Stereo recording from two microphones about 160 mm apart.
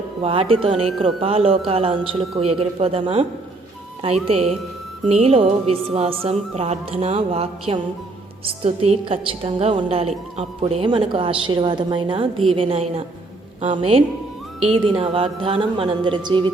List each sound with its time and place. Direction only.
0.2 s a woman's voice: 35° right (ahead or behind)